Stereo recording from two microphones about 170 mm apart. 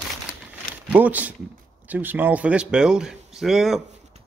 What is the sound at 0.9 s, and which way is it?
A man's voice, 10° right (ahead or behind).